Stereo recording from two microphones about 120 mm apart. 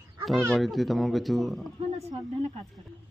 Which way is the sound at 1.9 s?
60° right (ahead or behind).